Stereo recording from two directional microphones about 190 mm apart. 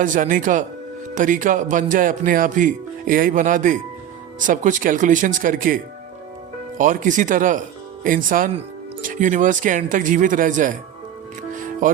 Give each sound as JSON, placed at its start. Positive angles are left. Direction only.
{"t": 0.0, "sound": "speech", "side_deg": -45}
{"t": 11.5, "sound": "music", "side_deg": -45}